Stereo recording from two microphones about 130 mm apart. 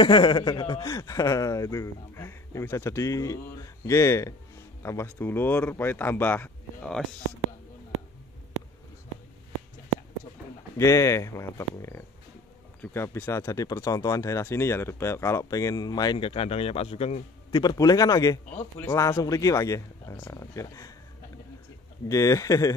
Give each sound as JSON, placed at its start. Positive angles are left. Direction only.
{"t": 0.0, "sound": "speech", "side_deg": 35}
{"t": 10.8, "sound": "speech", "side_deg": 25}
{"t": 17.5, "sound": "speech", "side_deg": 30}
{"t": 22.0, "sound": "speech", "side_deg": 25}